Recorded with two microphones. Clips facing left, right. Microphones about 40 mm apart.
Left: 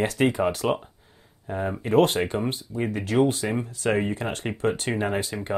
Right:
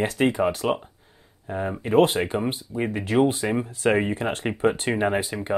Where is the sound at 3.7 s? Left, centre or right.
Right.